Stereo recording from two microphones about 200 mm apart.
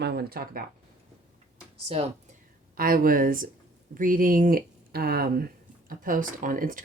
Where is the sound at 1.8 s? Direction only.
30° right (ahead or behind).